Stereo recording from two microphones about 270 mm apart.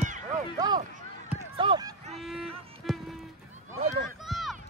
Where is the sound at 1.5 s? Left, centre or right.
Centre.